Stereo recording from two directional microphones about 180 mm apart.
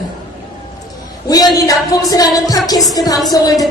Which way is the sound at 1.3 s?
20° left (ahead or behind).